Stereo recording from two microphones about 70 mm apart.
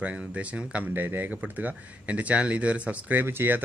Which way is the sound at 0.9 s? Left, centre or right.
Right.